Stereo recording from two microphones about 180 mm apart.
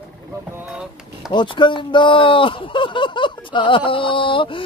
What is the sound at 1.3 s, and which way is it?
Speech, 25° left (ahead or behind).